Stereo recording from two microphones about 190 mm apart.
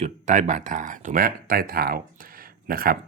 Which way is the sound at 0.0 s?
40° right (ahead or behind).